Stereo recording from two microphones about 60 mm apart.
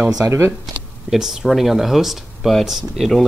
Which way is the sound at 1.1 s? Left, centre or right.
Centre.